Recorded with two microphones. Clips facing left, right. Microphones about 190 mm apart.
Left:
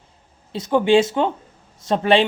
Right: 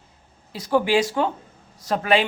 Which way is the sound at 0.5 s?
25° left (ahead or behind).